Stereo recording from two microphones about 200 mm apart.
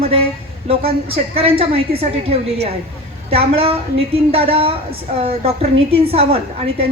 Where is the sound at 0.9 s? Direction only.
30° right (ahead or behind).